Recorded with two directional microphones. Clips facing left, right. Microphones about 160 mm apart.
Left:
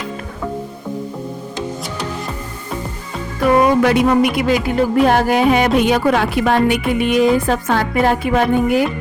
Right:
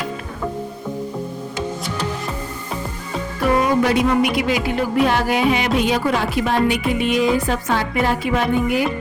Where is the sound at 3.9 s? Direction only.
55° left (ahead or behind).